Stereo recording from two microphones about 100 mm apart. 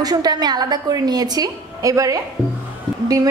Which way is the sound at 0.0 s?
40° right (ahead or behind).